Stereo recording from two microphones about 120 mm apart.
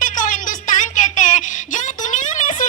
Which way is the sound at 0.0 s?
90° left.